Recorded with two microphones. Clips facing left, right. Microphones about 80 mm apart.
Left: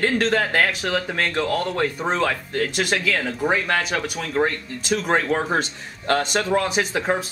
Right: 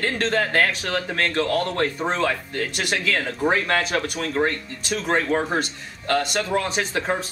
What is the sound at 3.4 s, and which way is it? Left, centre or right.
Speech, centre.